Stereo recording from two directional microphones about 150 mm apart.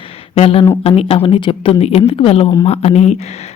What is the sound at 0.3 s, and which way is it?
A woman's voice, 40° left (ahead or behind).